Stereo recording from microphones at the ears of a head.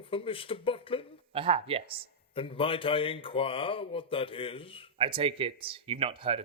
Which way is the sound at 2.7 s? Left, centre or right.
Left.